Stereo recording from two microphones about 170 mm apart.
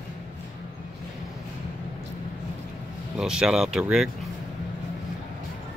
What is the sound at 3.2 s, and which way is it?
Speech, 5° right (ahead or behind).